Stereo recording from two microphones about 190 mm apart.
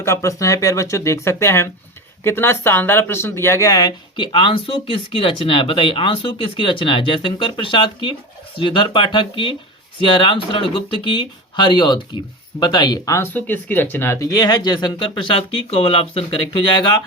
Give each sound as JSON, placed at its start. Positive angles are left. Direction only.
{"t": 0.0, "sound": "speech", "side_deg": 15}